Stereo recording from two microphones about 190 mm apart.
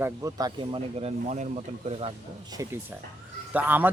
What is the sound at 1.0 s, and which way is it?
Speech, 35° right (ahead or behind).